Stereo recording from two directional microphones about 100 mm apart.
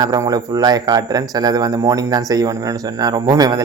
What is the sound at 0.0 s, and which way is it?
Speech, 40° right (ahead or behind).